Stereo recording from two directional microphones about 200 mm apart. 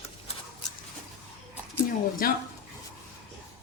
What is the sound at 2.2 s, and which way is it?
Speech, 45° left (ahead or behind).